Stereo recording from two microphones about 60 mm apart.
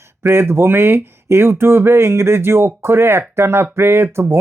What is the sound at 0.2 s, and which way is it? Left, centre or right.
Speech, right.